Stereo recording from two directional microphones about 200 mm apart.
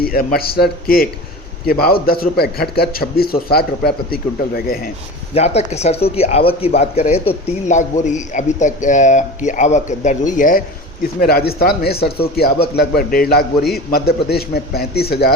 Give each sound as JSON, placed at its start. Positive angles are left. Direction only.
{"t": 0.0, "sound": "a man's voice", "side_deg": 45}
{"t": 5.3, "sound": "a man's voice", "side_deg": 30}